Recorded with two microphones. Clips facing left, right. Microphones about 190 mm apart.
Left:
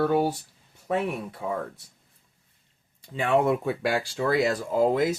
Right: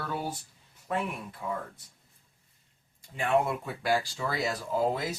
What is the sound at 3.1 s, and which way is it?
Speech, 80° left.